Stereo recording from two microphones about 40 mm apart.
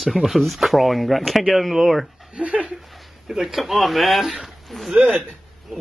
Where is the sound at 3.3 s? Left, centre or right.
Centre.